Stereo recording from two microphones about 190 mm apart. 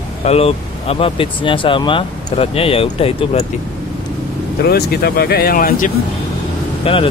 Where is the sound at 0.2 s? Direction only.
35° left (ahead or behind).